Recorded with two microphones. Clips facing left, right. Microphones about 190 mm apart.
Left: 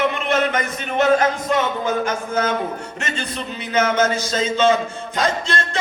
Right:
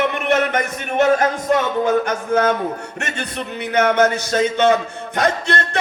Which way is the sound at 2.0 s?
65° right (ahead or behind).